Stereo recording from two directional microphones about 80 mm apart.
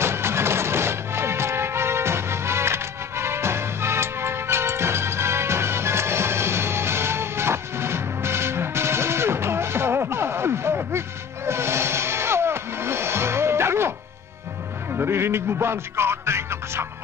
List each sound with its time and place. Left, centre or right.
0.0 s music: right